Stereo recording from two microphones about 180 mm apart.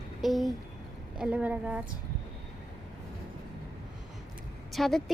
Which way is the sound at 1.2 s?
5° right (ahead or behind).